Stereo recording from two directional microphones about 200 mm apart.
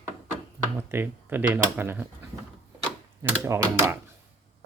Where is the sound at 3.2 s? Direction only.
10° right (ahead or behind).